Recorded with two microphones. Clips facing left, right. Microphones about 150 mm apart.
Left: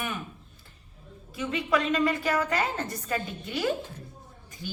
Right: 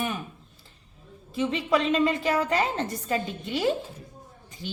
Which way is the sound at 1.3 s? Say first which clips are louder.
Right 3 dB; 30° right (ahead or behind).